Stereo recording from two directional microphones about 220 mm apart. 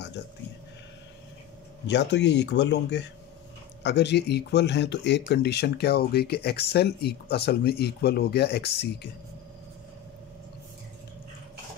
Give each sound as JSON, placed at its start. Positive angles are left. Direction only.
{"t": 1.9, "sound": "speech", "side_deg": 50}